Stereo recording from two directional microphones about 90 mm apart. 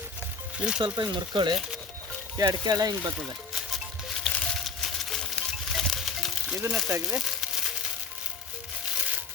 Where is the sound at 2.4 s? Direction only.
50° right (ahead or behind).